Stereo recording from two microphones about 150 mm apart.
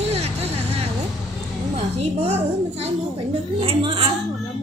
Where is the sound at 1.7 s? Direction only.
45° right (ahead or behind).